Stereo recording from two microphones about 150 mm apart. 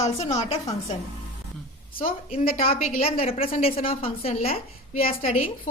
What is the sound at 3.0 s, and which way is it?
A woman's voice, 40° left (ahead or behind).